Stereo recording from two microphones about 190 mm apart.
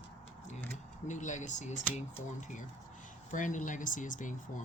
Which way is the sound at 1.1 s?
40° left (ahead or behind).